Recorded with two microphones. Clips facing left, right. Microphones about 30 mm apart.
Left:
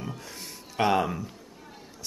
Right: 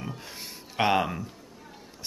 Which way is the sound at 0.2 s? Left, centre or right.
Centre.